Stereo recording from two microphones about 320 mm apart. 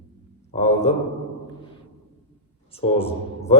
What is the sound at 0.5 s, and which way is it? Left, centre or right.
Mantra, centre.